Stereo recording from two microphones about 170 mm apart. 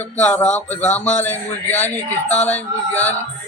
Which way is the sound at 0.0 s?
10° left (ahead or behind).